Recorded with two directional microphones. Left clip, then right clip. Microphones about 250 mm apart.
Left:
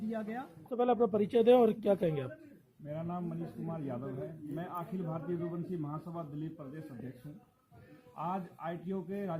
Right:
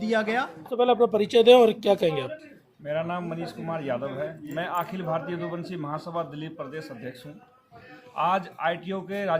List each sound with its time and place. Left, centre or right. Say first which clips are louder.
0.1 s speech: right 17 dB; right
0.7 s speech: right 8 dB; centre
2.8 s speech: right 12 dB; right
8.1 s speech: right 14 dB; right